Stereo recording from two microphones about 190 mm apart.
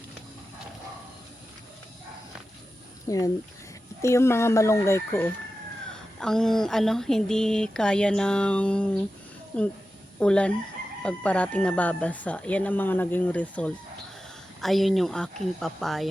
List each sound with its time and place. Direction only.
3.1 s speech: 15° left (ahead or behind)
6.1 s speech: 5° left (ahead or behind)